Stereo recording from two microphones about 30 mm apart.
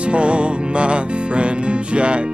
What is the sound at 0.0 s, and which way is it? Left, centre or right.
Music, right.